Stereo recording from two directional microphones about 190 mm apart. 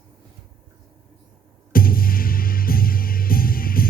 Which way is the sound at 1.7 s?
50° left (ahead or behind).